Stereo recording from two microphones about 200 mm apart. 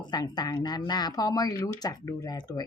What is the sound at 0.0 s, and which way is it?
Speech, 20° left (ahead or behind).